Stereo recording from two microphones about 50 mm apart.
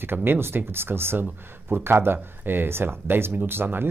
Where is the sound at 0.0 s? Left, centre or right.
Right.